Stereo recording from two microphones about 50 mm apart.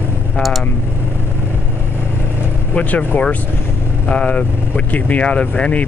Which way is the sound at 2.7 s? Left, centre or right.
Left.